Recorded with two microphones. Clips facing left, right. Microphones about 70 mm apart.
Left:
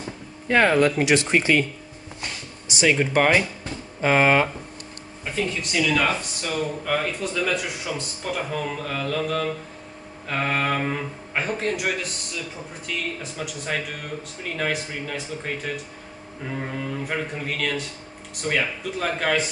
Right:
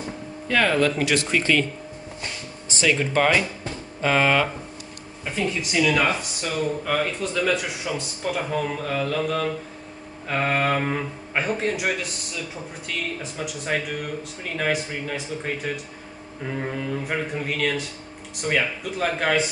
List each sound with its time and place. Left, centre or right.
0.5 s speech: left
2.7 s speech: centre
5.6 s speech: centre